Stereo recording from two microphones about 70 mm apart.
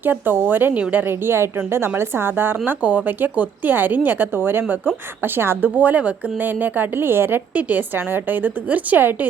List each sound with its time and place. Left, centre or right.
0.0 s a woman's voice: right